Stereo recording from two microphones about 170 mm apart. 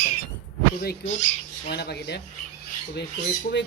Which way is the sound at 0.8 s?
65° left (ahead or behind).